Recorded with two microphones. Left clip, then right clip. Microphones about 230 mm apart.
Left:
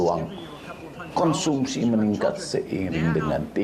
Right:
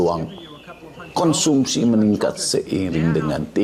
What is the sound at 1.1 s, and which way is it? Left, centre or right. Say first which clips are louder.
Speech: right 5 dB; right.